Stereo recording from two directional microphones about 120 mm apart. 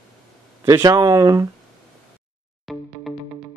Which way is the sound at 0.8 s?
30° right (ahead or behind).